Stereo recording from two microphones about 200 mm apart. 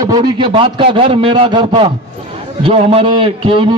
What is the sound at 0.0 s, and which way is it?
A man's voice, 20° right (ahead or behind).